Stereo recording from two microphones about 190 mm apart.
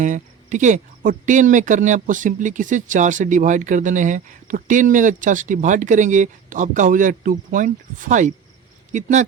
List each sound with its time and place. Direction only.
0.0 s speech: 40° right (ahead or behind)